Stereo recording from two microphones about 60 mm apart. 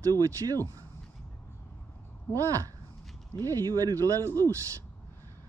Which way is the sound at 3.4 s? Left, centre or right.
Right.